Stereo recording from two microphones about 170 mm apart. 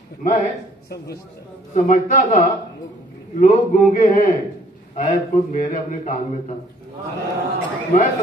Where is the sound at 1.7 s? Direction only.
45° left (ahead or behind).